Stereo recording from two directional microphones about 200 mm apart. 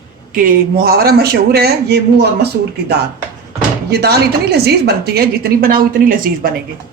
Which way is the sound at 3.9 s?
55° right (ahead or behind).